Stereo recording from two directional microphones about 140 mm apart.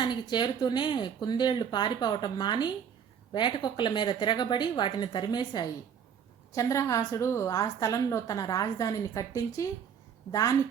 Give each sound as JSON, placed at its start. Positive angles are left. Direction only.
{"t": 0.0, "sound": "speech", "side_deg": 30}
{"t": 6.5, "sound": "a woman's voice", "side_deg": 20}